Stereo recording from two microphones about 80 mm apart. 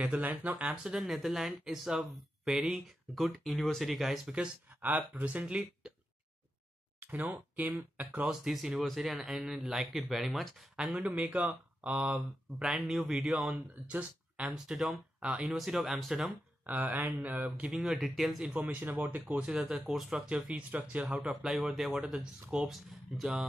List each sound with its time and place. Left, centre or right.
0.0 s speech: centre
0.8 s speech: centre
4.8 s speech: centre
7.0 s speech: centre
8.3 s speech: centre
10.8 s speech: centre
16.6 s speech: right
17.9 s speech: centre
18.4 s speech: centre
21.3 s speech: centre